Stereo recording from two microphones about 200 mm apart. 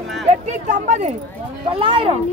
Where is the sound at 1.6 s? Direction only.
25° right (ahead or behind).